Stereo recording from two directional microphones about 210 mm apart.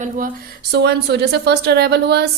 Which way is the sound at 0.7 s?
50° right (ahead or behind).